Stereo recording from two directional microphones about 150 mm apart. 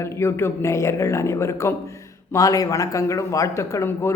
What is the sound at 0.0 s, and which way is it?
A man's voice, 15° left (ahead or behind).